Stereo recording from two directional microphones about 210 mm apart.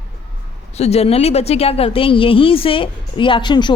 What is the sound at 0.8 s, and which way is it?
A woman's voice, 30° left (ahead or behind).